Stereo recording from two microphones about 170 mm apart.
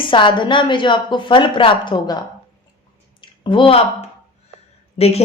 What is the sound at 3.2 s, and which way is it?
Speech, 30° left (ahead or behind).